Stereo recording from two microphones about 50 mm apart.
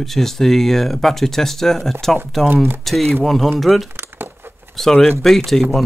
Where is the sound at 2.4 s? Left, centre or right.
Right.